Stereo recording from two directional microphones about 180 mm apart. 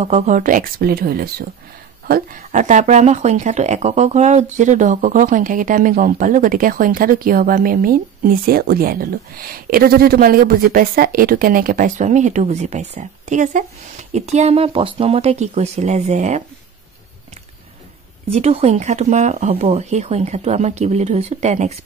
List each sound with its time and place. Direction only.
0.0 s speech: 40° right (ahead or behind)
18.3 s speech: 35° right (ahead or behind)